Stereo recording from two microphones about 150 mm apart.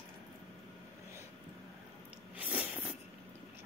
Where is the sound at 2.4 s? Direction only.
10° right (ahead or behind).